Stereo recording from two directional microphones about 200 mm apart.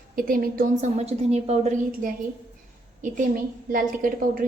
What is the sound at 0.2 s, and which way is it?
A woman's voice, 45° right (ahead or behind).